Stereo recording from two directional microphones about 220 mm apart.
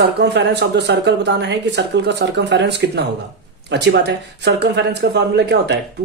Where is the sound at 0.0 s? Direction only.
50° right (ahead or behind).